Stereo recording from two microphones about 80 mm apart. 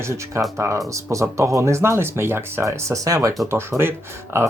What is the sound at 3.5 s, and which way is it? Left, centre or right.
Speech, right.